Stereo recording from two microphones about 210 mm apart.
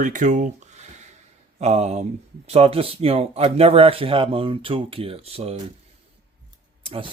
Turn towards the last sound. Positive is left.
turn(degrees=-25)  # may be behind; listen again after turning